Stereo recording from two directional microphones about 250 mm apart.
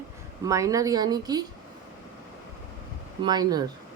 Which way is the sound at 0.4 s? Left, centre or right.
Centre.